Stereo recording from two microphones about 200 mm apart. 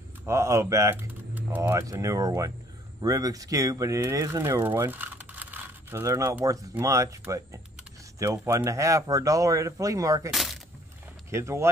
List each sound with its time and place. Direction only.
0.2 s speech: 15° right (ahead or behind)
10.3 s crack: centre (ahead or behind)
11.2 s speech: 15° right (ahead or behind)